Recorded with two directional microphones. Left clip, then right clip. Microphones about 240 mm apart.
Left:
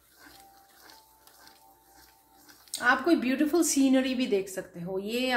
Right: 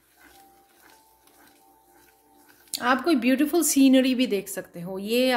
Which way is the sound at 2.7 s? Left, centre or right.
Right.